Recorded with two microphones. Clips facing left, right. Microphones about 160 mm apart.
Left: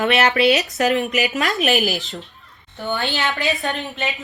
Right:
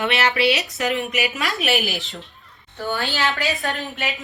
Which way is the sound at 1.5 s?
Centre (ahead or behind).